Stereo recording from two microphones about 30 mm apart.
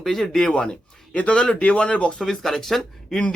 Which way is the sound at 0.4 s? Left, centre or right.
Left.